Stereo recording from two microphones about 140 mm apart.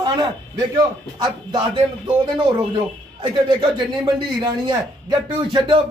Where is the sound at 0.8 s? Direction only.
30° right (ahead or behind).